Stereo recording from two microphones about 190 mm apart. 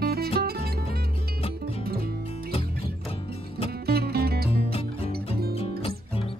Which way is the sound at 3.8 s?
55° right (ahead or behind).